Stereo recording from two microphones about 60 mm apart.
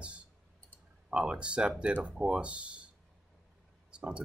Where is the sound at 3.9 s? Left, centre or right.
Centre.